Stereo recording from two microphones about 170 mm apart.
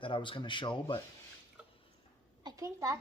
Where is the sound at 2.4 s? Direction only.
20° right (ahead or behind).